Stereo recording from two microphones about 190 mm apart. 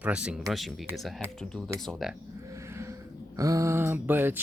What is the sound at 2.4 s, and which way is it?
Speech, 15° right (ahead or behind).